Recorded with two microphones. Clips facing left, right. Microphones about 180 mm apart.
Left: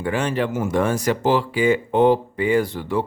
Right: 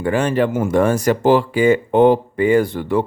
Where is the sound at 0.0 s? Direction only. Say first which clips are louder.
Right 5 dB; 50° right (ahead or behind).